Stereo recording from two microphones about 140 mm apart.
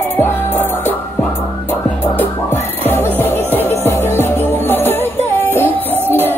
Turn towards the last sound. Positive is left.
turn(degrees=-15)  # may be behind; listen again after turning